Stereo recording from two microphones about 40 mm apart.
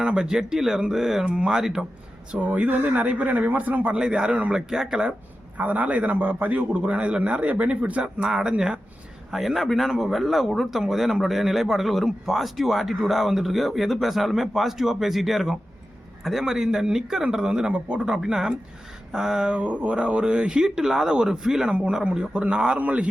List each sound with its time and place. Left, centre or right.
0.0 s a man's voice: right
2.3 s speech: right
3.9 s speech: right
4.5 s a man's voice: centre
5.5 s a man's voice: right
8.0 s speech: right
9.3 s a man's voice: centre
17.5 s speech: right
18.1 s a man's voice: centre
19.5 s a man's voice: right
20.7 s a man's voice: centre
22.1 s speech: right